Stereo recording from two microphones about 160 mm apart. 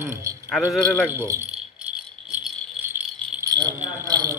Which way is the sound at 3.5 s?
25° right (ahead or behind).